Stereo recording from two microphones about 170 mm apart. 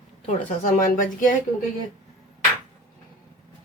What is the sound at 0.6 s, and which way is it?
Speech, 50° left (ahead or behind).